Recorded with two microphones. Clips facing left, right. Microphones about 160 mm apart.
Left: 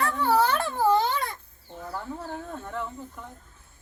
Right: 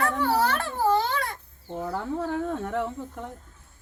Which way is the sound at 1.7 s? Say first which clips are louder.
Right 6 dB; 75° right (ahead or behind).